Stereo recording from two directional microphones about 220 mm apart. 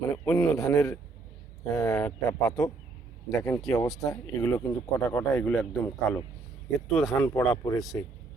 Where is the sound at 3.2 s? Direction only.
10° left (ahead or behind).